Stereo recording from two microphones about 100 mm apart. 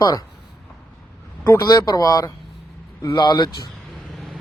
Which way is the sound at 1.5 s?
40° left (ahead or behind).